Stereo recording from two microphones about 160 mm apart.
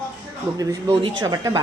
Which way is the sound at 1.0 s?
25° right (ahead or behind).